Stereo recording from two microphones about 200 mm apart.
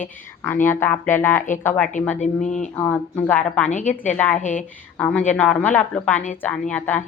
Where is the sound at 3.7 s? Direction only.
35° left (ahead or behind).